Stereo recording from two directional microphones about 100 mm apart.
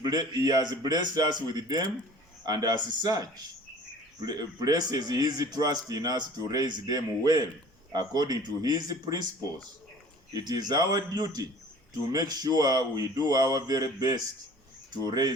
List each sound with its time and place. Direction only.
0.0 s a man's voice: 40° right (ahead or behind)
10.3 s a man's voice: 40° right (ahead or behind)